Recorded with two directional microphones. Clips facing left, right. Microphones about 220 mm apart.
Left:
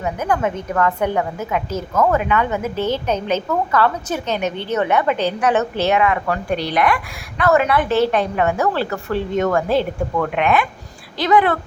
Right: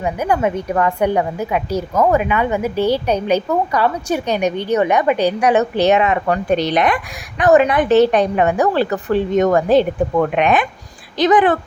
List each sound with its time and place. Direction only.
0.0 s a woman's voice: 10° right (ahead or behind)